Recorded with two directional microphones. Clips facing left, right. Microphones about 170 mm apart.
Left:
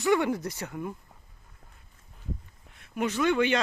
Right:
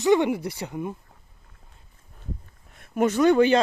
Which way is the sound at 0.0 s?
20° right (ahead or behind).